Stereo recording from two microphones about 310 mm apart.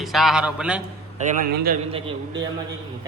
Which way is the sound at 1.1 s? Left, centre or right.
Right.